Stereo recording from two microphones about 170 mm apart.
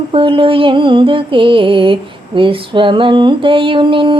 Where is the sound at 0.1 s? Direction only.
30° right (ahead or behind).